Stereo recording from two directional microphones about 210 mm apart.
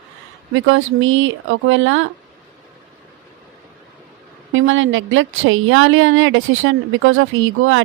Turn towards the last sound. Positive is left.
turn(degrees=-70)  # may be behind; listen again after turning